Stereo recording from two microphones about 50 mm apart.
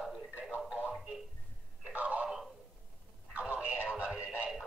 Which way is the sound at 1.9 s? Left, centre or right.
Right.